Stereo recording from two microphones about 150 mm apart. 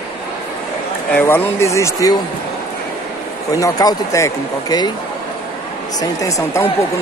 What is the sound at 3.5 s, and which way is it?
Speech, 25° left (ahead or behind).